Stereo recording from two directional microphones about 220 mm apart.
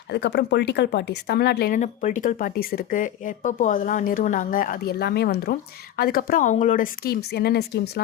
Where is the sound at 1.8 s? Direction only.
35° left (ahead or behind).